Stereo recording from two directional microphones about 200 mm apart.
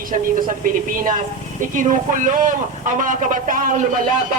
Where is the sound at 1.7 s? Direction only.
40° right (ahead or behind).